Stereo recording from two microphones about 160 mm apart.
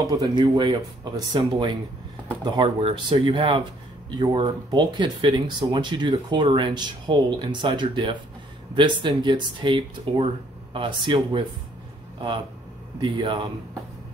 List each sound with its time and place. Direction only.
0.0 s speech: 25° right (ahead or behind)
2.4 s speech: 30° right (ahead or behind)
13.0 s speech: 30° right (ahead or behind)